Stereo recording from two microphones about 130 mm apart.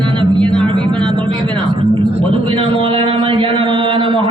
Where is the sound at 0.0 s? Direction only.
40° right (ahead or behind).